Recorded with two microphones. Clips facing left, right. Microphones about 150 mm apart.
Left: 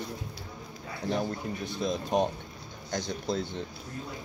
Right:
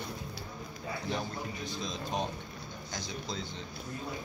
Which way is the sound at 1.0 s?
50° left (ahead or behind).